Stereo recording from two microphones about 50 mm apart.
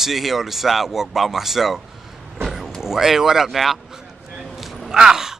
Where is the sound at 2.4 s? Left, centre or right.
Centre.